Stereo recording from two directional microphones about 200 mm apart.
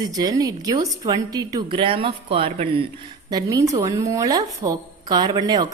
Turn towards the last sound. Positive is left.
turn(degrees=-20)  # may be behind; listen again after turning